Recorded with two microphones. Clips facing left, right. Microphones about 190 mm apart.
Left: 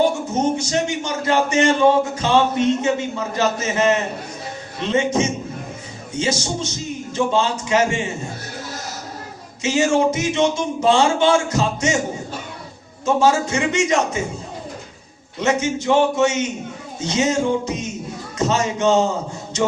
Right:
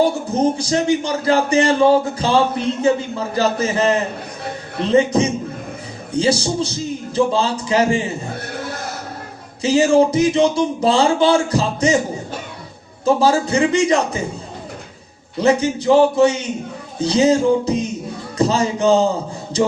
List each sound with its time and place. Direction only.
0.0 s speech: 35° right (ahead or behind)
8.3 s a sound: 60° right (ahead or behind)
9.6 s speech: 35° right (ahead or behind)
13.1 s speech: 35° right (ahead or behind)
15.4 s speech: 35° right (ahead or behind)